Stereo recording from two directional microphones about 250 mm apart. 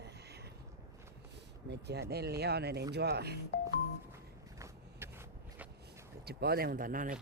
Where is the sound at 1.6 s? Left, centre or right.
Right.